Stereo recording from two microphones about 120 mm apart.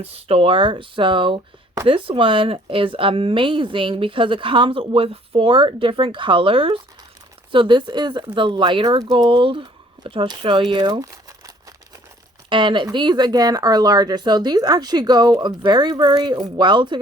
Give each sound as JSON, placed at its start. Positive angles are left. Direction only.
{"t": 0.0, "sound": "speech", "side_deg": -55}
{"t": 12.5, "sound": "speech", "side_deg": -40}